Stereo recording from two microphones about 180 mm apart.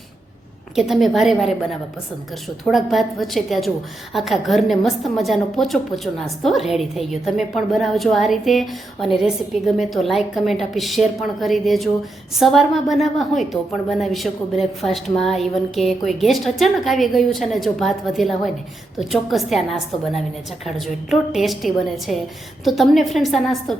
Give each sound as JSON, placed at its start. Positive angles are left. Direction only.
{"t": 0.8, "sound": "a woman's voice", "side_deg": 0}
{"t": 2.6, "sound": "a woman's voice", "side_deg": 0}